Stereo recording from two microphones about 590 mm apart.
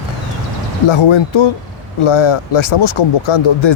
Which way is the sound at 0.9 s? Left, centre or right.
Left.